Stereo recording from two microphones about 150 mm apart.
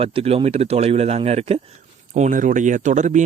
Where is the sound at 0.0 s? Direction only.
40° right (ahead or behind).